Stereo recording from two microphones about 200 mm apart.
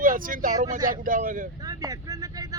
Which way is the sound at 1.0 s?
45° right (ahead or behind).